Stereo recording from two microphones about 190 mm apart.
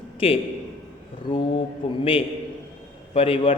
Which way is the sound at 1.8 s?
30° left (ahead or behind).